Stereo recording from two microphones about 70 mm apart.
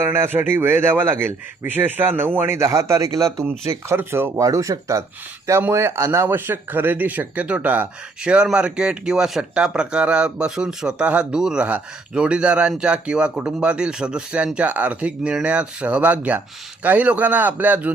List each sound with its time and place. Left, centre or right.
0.0 s a man's voice: right
2.6 s speech: right
3.8 s a man's voice: right
4.4 s speech: right
5.5 s a man's voice: right